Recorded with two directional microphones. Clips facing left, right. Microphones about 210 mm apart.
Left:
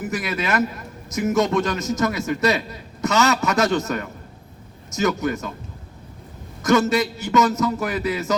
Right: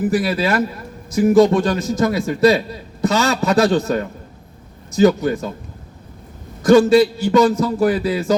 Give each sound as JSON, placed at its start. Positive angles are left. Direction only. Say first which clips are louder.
{"t": 0.0, "sound": "a man's voice", "louder": "right 8 dB", "side_deg": -30}
{"t": 6.6, "sound": "a man's voice", "louder": "right 8 dB", "side_deg": -30}